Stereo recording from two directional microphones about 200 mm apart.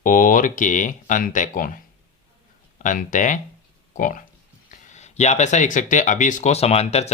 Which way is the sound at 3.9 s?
40° left (ahead or behind).